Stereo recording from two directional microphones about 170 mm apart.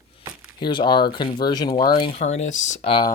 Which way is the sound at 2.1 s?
40° left (ahead or behind).